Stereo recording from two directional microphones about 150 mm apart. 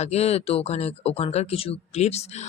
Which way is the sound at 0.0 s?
45° left (ahead or behind).